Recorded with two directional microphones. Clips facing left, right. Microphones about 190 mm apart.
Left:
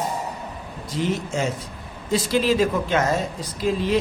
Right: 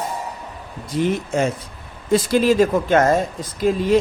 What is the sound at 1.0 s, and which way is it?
A man's voice, 55° right (ahead or behind).